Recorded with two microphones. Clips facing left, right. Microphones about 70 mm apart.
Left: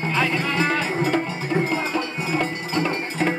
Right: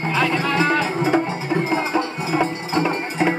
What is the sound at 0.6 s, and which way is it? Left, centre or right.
Music, right.